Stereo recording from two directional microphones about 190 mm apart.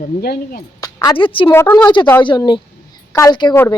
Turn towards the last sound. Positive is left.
turn(degrees=20)  # may be behind; listen again after turning